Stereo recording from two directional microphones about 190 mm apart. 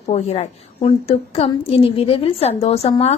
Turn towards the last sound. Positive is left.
turn(degrees=30)  # may be behind; listen again after turning